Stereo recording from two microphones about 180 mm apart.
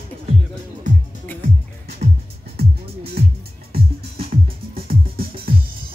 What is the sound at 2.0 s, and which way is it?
Music, 40° right (ahead or behind).